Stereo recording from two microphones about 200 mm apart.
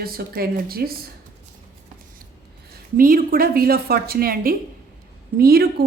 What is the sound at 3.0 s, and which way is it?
A woman's voice, 45° right (ahead or behind).